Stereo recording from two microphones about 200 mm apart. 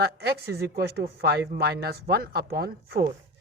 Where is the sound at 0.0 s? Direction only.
50° right (ahead or behind).